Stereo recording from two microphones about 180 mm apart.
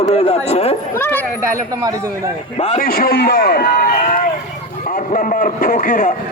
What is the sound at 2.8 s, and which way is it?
A man's voice, 60° left (ahead or behind).